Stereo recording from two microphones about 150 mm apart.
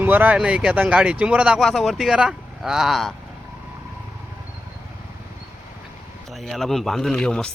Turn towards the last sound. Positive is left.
turn(degrees=5)  # may be behind; listen again after turning